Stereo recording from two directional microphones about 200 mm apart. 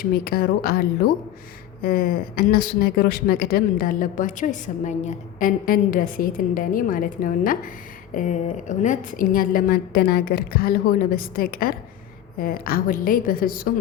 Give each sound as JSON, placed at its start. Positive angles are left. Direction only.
{"t": 0.0, "sound": "speech", "side_deg": 50}